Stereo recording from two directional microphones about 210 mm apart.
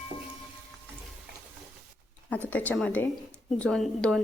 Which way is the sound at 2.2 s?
5° left (ahead or behind).